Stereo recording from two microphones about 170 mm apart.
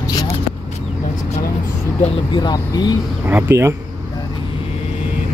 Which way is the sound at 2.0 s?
25° left (ahead or behind).